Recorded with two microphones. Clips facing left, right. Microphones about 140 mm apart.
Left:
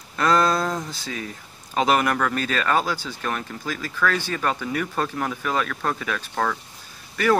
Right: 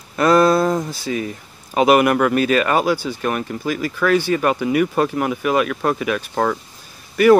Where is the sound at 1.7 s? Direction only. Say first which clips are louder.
Right 7 dB; 10° right (ahead or behind).